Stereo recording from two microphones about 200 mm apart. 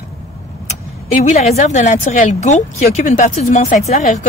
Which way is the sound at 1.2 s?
35° left (ahead or behind).